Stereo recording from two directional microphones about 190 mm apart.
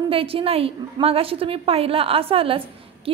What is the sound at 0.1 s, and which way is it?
A woman's voice, 30° right (ahead or behind).